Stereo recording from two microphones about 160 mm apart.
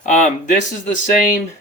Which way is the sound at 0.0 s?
50° left (ahead or behind).